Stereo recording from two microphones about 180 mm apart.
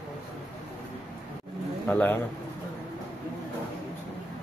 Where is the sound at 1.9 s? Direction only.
10° left (ahead or behind).